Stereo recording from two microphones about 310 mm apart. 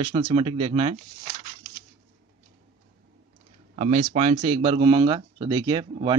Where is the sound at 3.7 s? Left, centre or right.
Right.